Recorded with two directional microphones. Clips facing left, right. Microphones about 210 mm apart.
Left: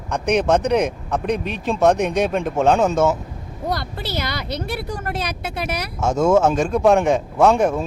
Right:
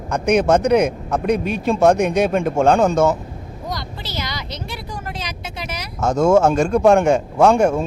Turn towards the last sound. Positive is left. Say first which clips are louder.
# right 2 dB
turn(degrees=0)  # may be behind; listen again after turning